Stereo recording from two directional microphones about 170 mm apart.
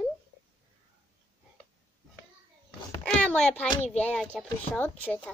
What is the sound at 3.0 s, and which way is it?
A child's voice, 5° left (ahead or behind).